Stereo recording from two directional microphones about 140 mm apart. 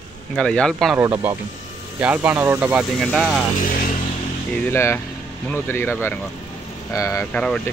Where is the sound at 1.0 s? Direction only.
20° right (ahead or behind).